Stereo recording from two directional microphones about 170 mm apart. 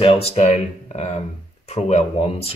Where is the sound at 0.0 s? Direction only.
35° left (ahead or behind).